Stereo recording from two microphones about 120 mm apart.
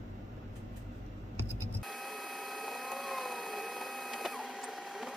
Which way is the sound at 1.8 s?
Centre (ahead or behind).